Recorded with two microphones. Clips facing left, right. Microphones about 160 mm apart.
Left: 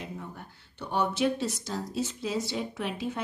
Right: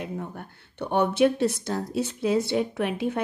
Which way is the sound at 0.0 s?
55° right (ahead or behind).